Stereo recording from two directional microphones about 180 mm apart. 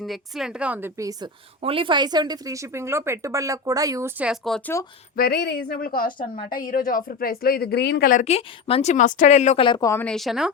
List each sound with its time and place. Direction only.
0.0 s a woman's voice: centre (ahead or behind); by 1.3 s 20° right (ahead or behind)
1.6 s speech: 30° right (ahead or behind)
4.2 s speech: centre (ahead or behind)
5.1 s a woman's voice: 60° left (ahead or behind)
8.2 s speech: 35° left (ahead or behind)
9.6 s a woman's voice: 20° left (ahead or behind)
10.1 s speech: centre (ahead or behind)